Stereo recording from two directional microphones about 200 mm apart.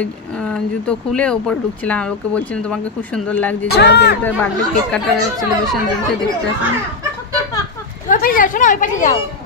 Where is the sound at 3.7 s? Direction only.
60° left (ahead or behind).